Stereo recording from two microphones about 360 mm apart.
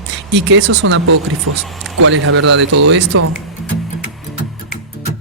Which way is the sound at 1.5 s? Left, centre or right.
Right.